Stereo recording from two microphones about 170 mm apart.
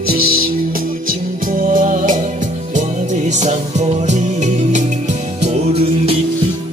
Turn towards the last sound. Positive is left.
turn(degrees=-35)  # may be behind; listen again after turning